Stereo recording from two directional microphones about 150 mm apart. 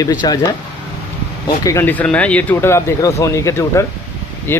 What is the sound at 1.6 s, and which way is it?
Speech, 20° left (ahead or behind).